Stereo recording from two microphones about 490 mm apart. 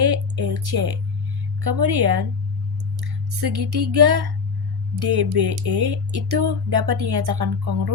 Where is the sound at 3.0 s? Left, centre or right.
Right.